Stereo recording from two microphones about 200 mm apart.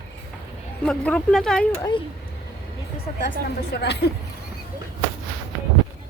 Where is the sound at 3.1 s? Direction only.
45° left (ahead or behind).